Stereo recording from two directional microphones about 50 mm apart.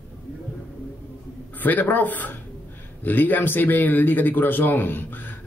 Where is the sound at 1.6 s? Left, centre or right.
Left.